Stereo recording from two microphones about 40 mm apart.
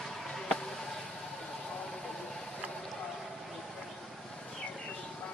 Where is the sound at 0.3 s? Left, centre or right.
Centre.